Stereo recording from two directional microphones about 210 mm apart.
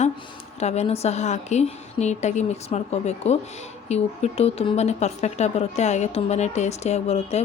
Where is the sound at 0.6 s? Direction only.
30° left (ahead or behind).